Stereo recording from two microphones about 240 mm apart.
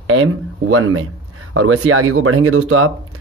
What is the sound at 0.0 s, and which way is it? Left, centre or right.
Speech, right.